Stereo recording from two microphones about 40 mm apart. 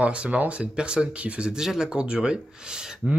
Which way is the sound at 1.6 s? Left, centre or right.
Centre.